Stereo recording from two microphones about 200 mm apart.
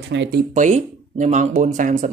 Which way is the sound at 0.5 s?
40° right (ahead or behind).